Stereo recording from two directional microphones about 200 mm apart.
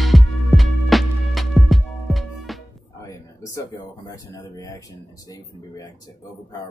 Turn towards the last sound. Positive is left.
turn(degrees=20)  # may be behind; listen again after turning